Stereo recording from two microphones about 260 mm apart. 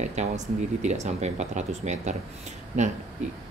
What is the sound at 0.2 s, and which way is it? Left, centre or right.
Speech, right.